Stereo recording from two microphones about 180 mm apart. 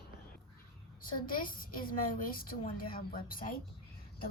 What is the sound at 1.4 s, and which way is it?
A woman's voice, 50° left (ahead or behind).